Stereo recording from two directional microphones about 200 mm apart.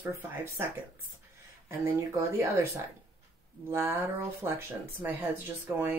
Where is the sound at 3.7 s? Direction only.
10° right (ahead or behind).